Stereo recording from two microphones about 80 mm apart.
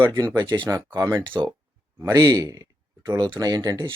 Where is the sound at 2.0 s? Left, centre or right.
Right.